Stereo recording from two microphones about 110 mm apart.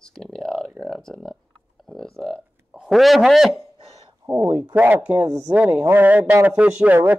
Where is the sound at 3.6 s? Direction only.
60° right (ahead or behind).